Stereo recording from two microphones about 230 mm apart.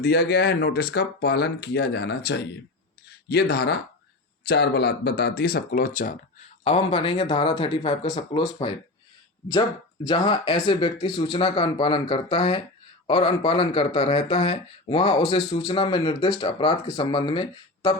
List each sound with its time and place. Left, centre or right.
0.0 s speech: left
6.7 s speech: left
10.1 s speech: centre